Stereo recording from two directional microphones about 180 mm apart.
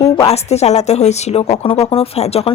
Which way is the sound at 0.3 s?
35° left (ahead or behind).